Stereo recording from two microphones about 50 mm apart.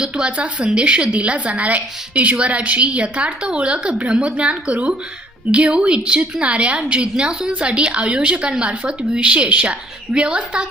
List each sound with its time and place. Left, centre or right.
0.3 s a woman's voice: right